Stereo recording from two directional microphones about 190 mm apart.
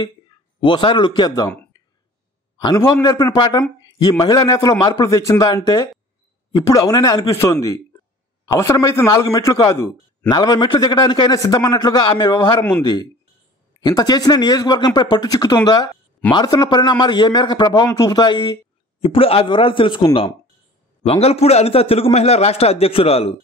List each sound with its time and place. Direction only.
0.6 s a man's voice: 25° left (ahead or behind)
2.6 s a man's voice: 20° left (ahead or behind)
21.0 s a man's voice: 30° left (ahead or behind)